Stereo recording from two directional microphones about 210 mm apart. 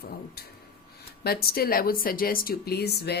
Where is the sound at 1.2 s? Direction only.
45° left (ahead or behind).